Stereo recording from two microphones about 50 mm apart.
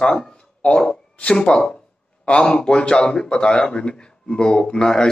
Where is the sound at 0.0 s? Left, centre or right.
Centre.